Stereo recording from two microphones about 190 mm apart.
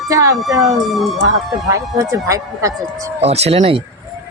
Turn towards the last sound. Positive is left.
turn(degrees=-30)  # may be behind; listen again after turning